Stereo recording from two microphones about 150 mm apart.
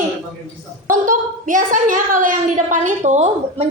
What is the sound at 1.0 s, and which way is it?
A woman's voice, 60° right (ahead or behind).